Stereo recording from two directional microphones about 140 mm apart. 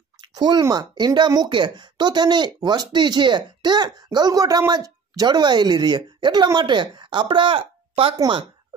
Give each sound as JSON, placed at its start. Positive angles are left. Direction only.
{"t": 0.3, "sound": "a woman's voice", "side_deg": -30}